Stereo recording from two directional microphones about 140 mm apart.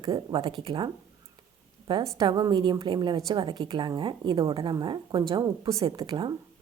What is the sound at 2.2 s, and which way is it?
Speech, 30° right (ahead or behind).